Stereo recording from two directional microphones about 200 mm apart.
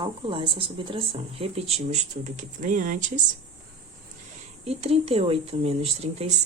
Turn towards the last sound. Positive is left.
turn(degrees=-30)  # may be behind; listen again after turning